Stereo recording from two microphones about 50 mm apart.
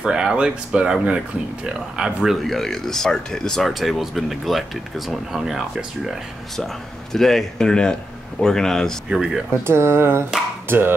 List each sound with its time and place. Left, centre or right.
0.0 s speech: centre
2.0 s speech: centre
2.4 s speech: centre
6.5 s speech: centre
9.1 s speech: centre
9.7 s speech: right